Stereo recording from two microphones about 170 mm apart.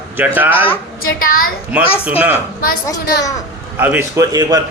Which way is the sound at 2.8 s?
20° left (ahead or behind).